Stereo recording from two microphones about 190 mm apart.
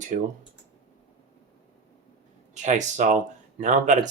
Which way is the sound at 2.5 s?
40° right (ahead or behind).